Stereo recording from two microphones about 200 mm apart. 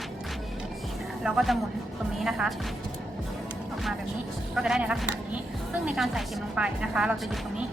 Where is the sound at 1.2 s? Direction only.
Centre (ahead or behind).